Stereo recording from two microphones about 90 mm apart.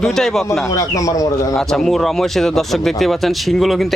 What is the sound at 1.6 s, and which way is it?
Speech, 5° left (ahead or behind).